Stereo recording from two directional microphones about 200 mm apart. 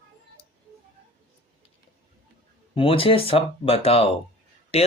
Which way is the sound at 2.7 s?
25° left (ahead or behind).